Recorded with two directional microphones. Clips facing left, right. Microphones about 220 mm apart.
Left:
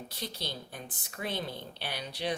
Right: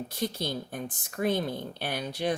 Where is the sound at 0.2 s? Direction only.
50° right (ahead or behind).